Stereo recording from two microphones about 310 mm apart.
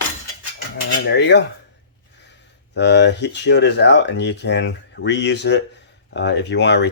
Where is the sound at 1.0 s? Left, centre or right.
Left.